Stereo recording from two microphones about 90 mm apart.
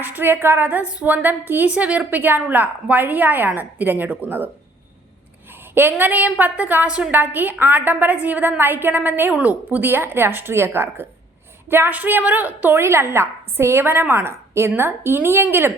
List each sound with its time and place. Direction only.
0.0 s a woman's voice: 20° right (ahead or behind)
5.7 s a woman's voice: 20° right (ahead or behind)